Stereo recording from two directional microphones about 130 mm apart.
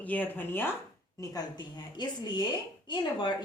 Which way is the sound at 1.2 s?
30° left (ahead or behind).